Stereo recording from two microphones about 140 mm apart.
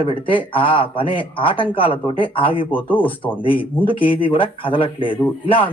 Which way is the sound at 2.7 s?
15° left (ahead or behind).